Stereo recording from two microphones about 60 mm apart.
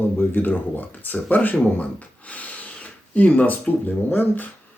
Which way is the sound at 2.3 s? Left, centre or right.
Left.